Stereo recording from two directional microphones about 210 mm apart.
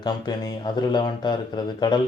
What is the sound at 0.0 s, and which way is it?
Speech, 20° left (ahead or behind).